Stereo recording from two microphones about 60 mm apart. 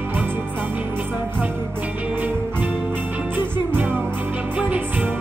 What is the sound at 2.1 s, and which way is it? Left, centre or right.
Music, right.